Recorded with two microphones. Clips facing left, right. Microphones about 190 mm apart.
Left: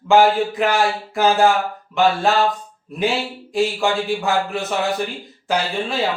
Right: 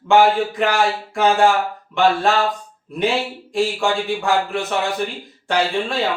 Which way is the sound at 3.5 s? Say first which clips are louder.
Even; centre (ahead or behind).